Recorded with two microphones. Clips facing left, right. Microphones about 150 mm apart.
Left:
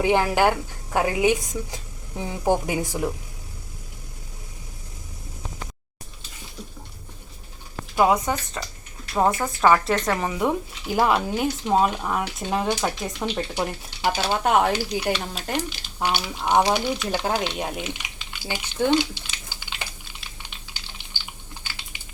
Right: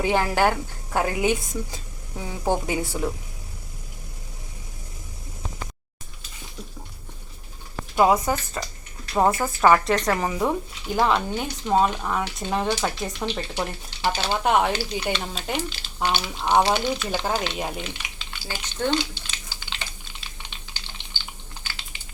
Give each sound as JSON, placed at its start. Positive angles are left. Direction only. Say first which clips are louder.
{"t": 0.0, "sound": "speech", "louder": "left 2 dB", "side_deg": 15}
{"t": 7.9, "sound": "speech", "louder": "right 1 dB", "side_deg": 0}
{"t": 13.3, "sound": "speech", "louder": "left 2 dB", "side_deg": 10}
{"t": 17.9, "sound": "typing", "louder": "even", "side_deg": 15}
{"t": 21.9, "sound": "a sound", "louder": "left 1 dB", "side_deg": 15}